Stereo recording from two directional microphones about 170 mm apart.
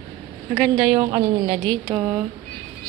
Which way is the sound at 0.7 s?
35° right (ahead or behind).